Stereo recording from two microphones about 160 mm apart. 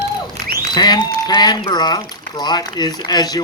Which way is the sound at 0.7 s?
25° left (ahead or behind).